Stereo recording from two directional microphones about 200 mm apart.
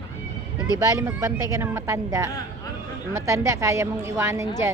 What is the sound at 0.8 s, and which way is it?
Speech, 15° right (ahead or behind).